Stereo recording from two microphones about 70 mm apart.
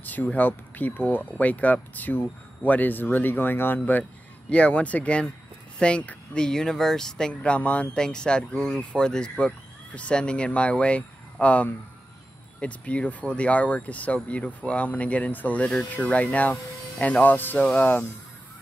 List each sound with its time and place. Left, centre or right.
0.0 s speech: left